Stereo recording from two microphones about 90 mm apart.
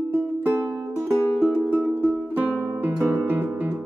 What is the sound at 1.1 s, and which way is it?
Music, 30° left (ahead or behind).